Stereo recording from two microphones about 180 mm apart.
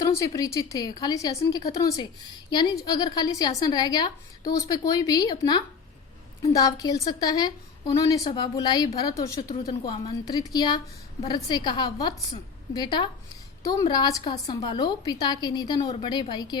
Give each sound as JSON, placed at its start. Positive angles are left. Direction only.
{"t": 0.0, "sound": "a woman's voice", "side_deg": 20}